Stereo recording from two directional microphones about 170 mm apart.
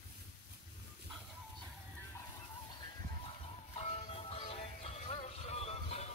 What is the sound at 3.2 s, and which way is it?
Music, 35° left (ahead or behind).